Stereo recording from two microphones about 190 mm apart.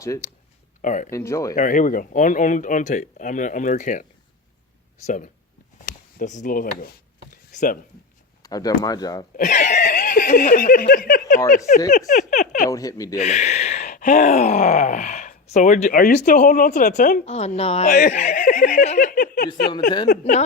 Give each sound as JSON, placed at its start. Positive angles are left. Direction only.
{"t": 0.8, "sound": "speech", "side_deg": 40}
{"t": 1.1, "sound": "speech", "side_deg": 15}
{"t": 1.5, "sound": "speech", "side_deg": 40}
{"t": 5.0, "sound": "speech", "side_deg": 40}
{"t": 5.8, "sound": "a sound", "side_deg": 45}
{"t": 8.4, "sound": "speech", "side_deg": 20}
{"t": 9.6, "sound": "speech", "side_deg": 40}
{"t": 12.7, "sound": "speech", "side_deg": 20}
{"t": 13.1, "sound": "speech", "side_deg": 35}
{"t": 17.8, "sound": "giggle", "side_deg": 45}
{"t": 20.1, "sound": "speech", "side_deg": 40}